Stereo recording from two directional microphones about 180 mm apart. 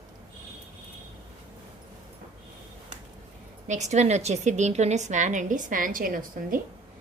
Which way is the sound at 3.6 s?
40° right (ahead or behind).